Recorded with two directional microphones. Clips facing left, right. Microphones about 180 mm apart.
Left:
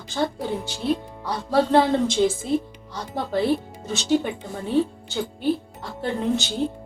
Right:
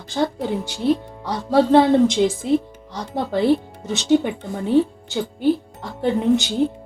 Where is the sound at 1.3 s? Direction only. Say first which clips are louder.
Right 4 dB; 20° right (ahead or behind).